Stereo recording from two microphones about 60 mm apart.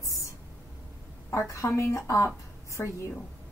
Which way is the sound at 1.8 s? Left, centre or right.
Left.